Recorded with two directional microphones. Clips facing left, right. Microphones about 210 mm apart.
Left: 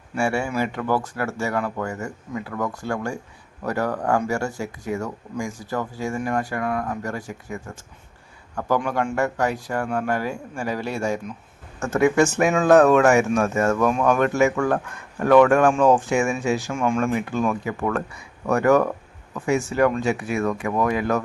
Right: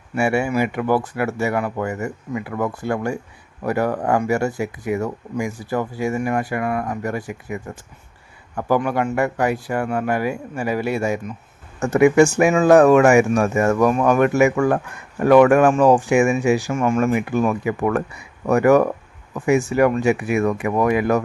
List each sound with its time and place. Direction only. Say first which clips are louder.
0.2 s a man's voice: right 4 dB; 10° right (ahead or behind)